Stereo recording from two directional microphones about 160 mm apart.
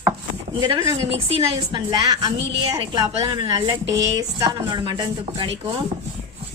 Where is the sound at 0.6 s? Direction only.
25° right (ahead or behind).